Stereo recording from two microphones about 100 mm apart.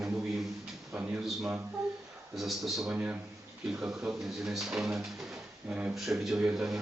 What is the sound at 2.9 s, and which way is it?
Speech, 15° right (ahead or behind).